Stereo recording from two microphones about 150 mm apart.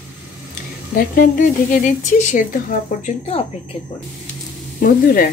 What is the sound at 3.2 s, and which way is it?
Speech, 40° left (ahead or behind).